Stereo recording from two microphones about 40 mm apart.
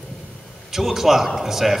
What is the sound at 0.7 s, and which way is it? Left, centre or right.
A man's voice, centre.